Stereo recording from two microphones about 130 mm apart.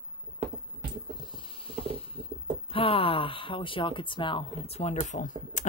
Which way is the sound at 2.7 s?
45° left (ahead or behind).